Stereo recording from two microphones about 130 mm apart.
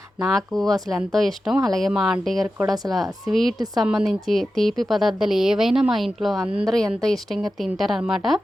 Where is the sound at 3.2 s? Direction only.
Centre (ahead or behind).